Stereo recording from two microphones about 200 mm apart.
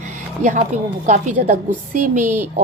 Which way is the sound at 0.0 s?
35° right (ahead or behind).